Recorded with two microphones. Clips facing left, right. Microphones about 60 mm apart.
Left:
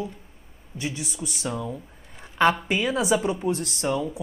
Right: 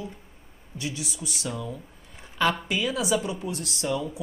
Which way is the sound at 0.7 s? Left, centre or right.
Left.